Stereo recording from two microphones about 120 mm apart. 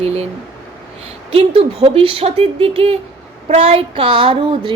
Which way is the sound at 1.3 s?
50° right (ahead or behind).